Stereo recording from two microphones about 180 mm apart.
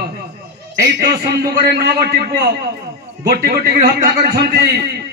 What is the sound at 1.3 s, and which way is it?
A man's voice, 60° right (ahead or behind).